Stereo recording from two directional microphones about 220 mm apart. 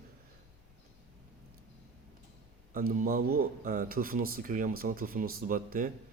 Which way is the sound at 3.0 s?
40° right (ahead or behind).